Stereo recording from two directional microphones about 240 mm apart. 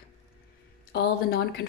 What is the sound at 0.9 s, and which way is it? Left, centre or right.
Speech, left.